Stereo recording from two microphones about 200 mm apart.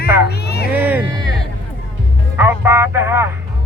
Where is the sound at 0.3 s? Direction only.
55° left (ahead or behind).